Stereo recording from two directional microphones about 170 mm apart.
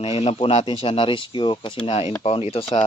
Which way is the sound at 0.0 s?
35° left (ahead or behind).